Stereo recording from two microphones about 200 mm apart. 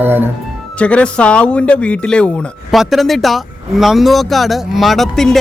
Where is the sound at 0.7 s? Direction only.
5° left (ahead or behind).